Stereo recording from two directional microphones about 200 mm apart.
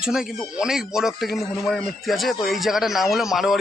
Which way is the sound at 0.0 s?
5° right (ahead or behind).